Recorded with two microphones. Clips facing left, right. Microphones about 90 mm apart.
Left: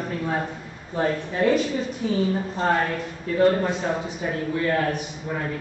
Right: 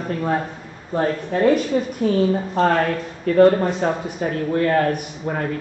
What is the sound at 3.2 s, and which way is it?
Speech, 55° right (ahead or behind).